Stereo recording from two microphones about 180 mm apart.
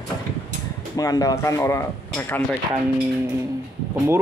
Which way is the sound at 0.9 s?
20° left (ahead or behind).